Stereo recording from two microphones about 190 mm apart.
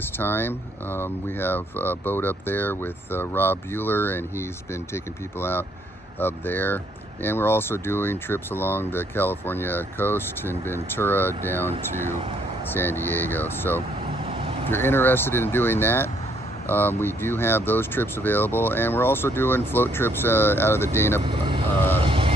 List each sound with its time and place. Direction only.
0.2 s speech: 10° left (ahead or behind)
14.0 s vehicle: 30° right (ahead or behind)
14.7 s speech: 10° left (ahead or behind)
21.2 s speech: 25° right (ahead or behind)
21.7 s speech: 10° left (ahead or behind)
22.0 s vehicle: 30° right (ahead or behind)